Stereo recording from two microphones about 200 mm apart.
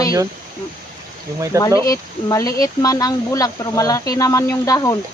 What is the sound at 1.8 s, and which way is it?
Speech, 15° left (ahead or behind).